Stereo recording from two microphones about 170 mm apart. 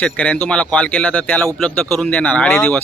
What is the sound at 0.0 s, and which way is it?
Speech, 10° left (ahead or behind).